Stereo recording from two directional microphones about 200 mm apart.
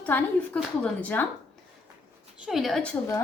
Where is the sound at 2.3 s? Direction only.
5° right (ahead or behind).